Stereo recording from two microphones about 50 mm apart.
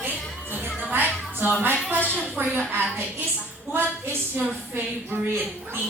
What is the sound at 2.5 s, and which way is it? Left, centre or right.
Speech, right.